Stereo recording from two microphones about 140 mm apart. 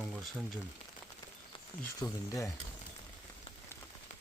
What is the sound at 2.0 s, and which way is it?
Speech, 25° left (ahead or behind).